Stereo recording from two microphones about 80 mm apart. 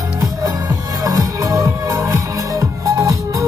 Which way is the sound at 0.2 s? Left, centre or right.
Right.